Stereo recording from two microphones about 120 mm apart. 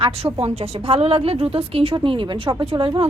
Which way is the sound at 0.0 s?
55° right (ahead or behind).